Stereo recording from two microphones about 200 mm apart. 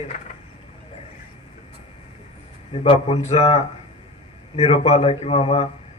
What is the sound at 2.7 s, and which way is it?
A man's voice, 30° left (ahead or behind).